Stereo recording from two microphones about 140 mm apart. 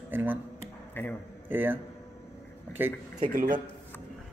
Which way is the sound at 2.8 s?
15° right (ahead or behind).